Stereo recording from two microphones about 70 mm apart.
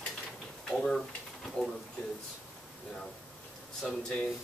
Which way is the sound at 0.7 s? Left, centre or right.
Centre.